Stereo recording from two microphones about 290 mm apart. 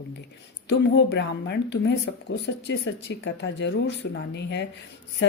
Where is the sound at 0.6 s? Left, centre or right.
Left.